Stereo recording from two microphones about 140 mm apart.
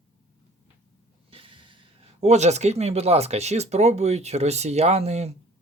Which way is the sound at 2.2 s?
55° right (ahead or behind).